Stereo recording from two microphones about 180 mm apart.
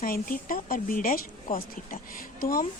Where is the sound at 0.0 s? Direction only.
50° left (ahead or behind).